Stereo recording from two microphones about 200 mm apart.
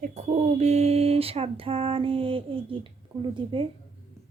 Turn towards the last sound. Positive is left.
turn(degrees=-25)  # may be behind; listen again after turning